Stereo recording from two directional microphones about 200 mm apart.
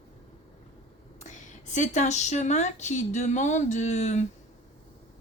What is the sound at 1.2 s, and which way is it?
A woman's voice, 35° left (ahead or behind).